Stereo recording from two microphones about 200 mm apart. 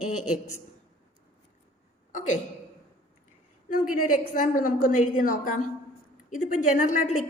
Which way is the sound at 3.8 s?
40° left (ahead or behind).